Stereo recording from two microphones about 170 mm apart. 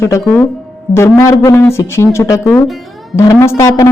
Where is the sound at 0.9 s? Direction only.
15° left (ahead or behind).